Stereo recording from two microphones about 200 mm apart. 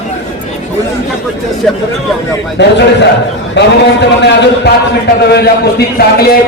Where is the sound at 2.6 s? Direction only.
60° left (ahead or behind).